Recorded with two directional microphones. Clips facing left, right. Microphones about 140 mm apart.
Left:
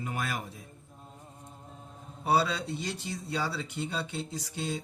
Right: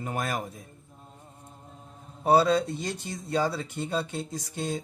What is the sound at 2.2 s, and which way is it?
Speech, 45° right (ahead or behind).